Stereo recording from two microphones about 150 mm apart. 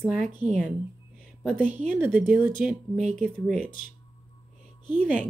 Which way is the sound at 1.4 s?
5° left (ahead or behind).